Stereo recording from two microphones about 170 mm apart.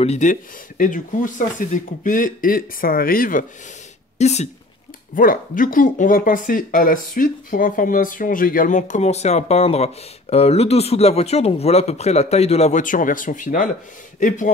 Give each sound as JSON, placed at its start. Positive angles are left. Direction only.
{"t": 0.0, "sound": "speech", "side_deg": 45}
{"t": 4.2, "sound": "speech", "side_deg": 40}
{"t": 5.1, "sound": "speech", "side_deg": 55}